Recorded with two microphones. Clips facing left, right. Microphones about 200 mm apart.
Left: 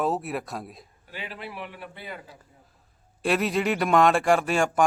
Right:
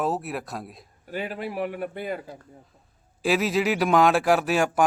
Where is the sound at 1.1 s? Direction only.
45° right (ahead or behind).